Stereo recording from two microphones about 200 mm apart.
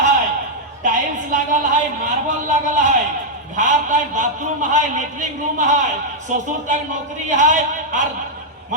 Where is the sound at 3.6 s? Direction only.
40° right (ahead or behind).